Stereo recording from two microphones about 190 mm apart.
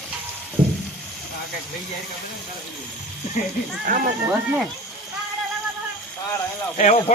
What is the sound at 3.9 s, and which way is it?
Speech, 45° right (ahead or behind).